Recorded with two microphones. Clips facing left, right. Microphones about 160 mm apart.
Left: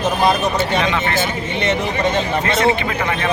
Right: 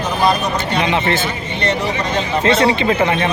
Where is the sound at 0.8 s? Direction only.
20° right (ahead or behind).